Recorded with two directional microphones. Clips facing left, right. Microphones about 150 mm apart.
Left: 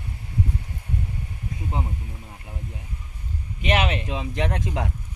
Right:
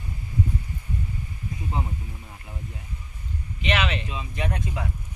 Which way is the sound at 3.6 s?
45° left (ahead or behind).